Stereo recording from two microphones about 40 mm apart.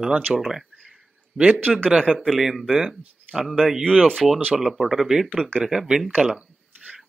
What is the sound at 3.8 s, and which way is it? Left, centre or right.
Speech, centre.